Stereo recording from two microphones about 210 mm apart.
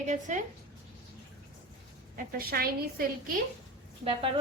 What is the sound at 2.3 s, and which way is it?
A woman's voice, 45° right (ahead or behind).